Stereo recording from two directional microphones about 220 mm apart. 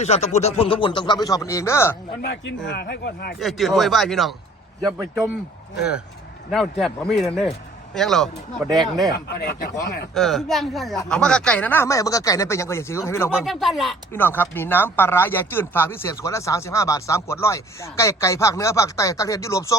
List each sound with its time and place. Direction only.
0.0 s speech: 30° left (ahead or behind); by 2.0 s 10° left (ahead or behind)
2.2 s speech: 55° left (ahead or behind)
3.4 s a man's voice: centre (ahead or behind)
6.5 s a man's voice: centre (ahead or behind)
8.7 s speech: 15° right (ahead or behind)
9.1 s speech: 40° left (ahead or behind)
10.2 s speech: centre (ahead or behind)
13.3 s a man's voice: centre (ahead or behind)